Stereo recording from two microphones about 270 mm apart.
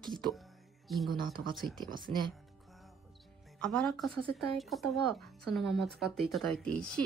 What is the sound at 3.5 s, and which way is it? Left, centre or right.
Speech, centre.